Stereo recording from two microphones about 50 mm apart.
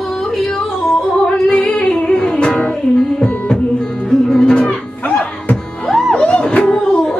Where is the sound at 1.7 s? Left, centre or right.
Centre.